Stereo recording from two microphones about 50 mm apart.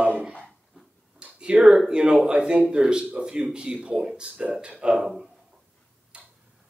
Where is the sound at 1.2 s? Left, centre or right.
Right.